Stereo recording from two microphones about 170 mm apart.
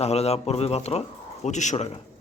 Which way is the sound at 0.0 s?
40° left (ahead or behind).